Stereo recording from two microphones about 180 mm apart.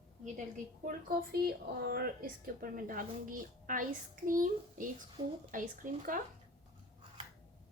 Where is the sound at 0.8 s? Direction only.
60° right (ahead or behind).